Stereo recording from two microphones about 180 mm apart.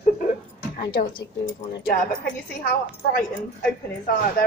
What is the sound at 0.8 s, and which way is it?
Speech, 60° left (ahead or behind).